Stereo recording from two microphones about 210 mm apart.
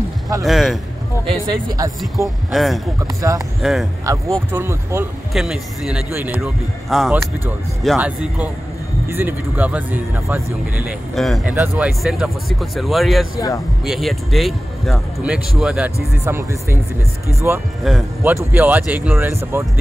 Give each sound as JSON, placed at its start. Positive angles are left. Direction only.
{"t": 0.5, "sound": "speech", "side_deg": 0}
{"t": 1.2, "sound": "speech", "side_deg": -20}
{"t": 2.0, "sound": "speech", "side_deg": 0}
{"t": 4.1, "sound": "speech", "side_deg": -15}